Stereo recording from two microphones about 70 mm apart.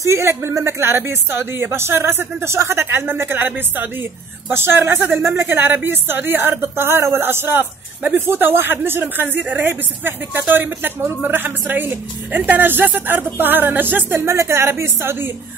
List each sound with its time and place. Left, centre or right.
0.0 s speech: right